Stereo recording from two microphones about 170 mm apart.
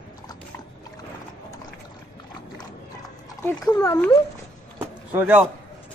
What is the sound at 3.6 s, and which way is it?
Speech, 20° left (ahead or behind).